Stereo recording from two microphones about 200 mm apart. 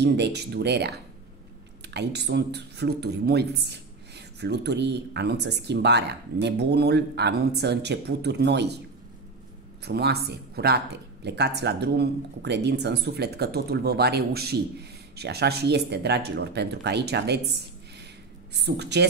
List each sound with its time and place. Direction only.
0.0 s speech: 60° right (ahead or behind)
9.8 s speech: 55° right (ahead or behind)
18.5 s speech: 60° right (ahead or behind)